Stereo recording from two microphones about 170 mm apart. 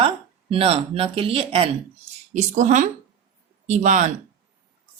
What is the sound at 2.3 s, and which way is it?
Speech, 45° right (ahead or behind).